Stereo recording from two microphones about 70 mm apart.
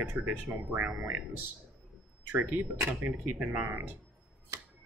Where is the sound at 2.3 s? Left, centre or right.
Right.